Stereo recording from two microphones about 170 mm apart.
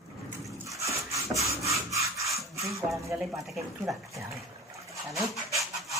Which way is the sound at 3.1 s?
10° right (ahead or behind).